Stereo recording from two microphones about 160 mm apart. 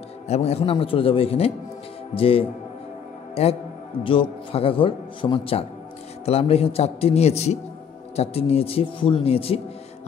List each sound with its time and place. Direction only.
0.3 s a man's voice: 40° left (ahead or behind)
4.0 s a man's voice: 35° left (ahead or behind)